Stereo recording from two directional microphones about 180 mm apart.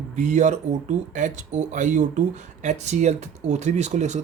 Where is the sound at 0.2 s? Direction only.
45° right (ahead or behind).